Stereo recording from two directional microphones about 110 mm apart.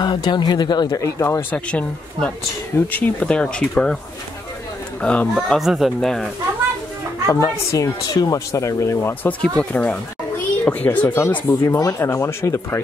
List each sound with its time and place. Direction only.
0.0 s speech: 45° left (ahead or behind)
1.5 s speech: 10° left (ahead or behind)
5.0 s speech: 10° left (ahead or behind)
5.3 s speech: centre (ahead or behind)
7.2 s speech: 30° left (ahead or behind)
9.4 s speech: 10° left (ahead or behind)